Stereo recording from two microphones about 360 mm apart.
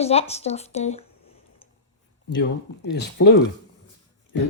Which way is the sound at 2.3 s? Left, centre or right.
Left.